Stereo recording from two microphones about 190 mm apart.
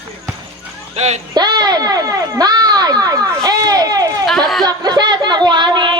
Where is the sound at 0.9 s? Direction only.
35° right (ahead or behind).